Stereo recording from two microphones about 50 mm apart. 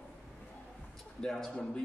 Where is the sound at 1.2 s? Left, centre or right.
Centre.